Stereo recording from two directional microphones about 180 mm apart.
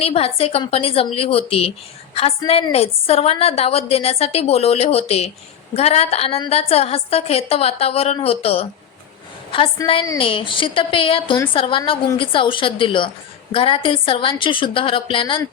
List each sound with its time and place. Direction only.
0.0 s a woman's voice: 35° left (ahead or behind)
9.8 s a woman's voice: 25° left (ahead or behind)